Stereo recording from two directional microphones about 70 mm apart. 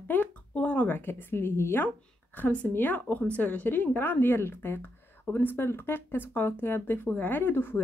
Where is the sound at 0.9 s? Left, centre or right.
Left.